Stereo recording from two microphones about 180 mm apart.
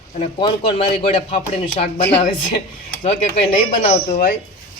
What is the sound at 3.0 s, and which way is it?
Speech, 40° left (ahead or behind).